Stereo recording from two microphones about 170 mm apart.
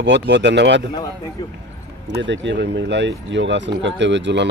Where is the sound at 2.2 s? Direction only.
90° right.